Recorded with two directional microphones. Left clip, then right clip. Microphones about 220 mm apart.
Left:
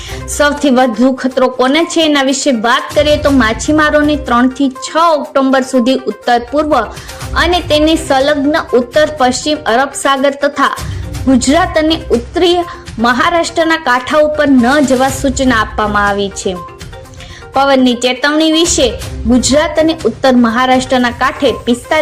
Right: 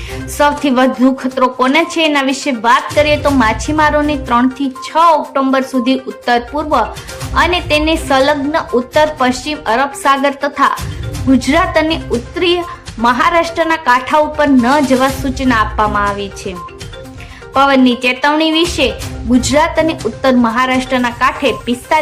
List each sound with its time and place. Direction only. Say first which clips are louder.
0.3 s a woman's voice: left 2 dB; 15° left (ahead or behind)